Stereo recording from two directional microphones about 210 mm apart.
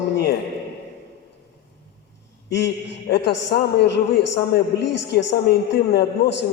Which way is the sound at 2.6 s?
55° left (ahead or behind).